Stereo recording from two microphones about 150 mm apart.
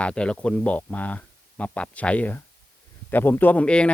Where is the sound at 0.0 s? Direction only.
5° left (ahead or behind).